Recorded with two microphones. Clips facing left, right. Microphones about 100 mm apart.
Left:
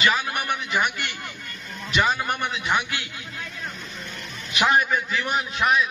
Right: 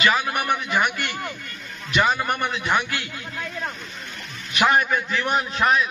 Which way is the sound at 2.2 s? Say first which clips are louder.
Right 2 dB; 10° right (ahead or behind).